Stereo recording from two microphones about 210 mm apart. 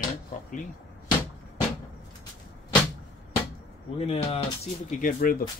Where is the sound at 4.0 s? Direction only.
30° left (ahead or behind).